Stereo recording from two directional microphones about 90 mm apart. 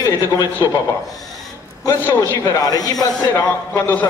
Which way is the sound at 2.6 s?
45° left (ahead or behind).